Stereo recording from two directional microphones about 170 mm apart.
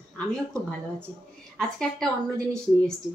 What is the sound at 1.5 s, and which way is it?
A woman's voice, 5° left (ahead or behind).